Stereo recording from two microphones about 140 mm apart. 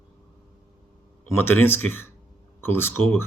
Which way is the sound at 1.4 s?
15° left (ahead or behind).